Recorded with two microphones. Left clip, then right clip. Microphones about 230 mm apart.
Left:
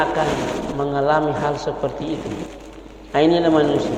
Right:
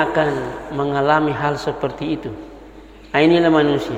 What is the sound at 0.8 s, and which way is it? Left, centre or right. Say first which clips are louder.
A man's voice: right 2 dB; right.